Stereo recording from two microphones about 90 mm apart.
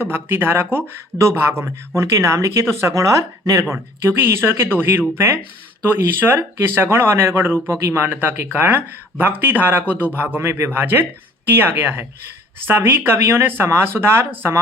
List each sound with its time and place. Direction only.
0.0 s speech: 25° right (ahead or behind)